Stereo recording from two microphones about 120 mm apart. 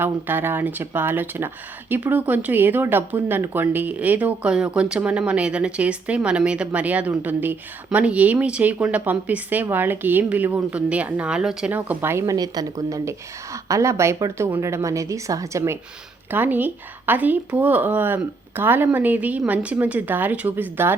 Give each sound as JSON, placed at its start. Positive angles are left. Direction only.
{"t": 0.0, "sound": "speech", "side_deg": -15}